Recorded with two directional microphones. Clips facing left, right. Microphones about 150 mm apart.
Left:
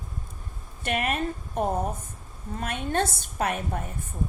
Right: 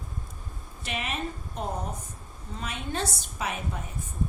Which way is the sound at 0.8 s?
55° left (ahead or behind).